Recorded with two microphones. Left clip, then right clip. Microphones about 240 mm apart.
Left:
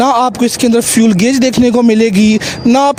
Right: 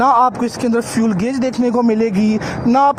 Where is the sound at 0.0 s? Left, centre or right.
Left.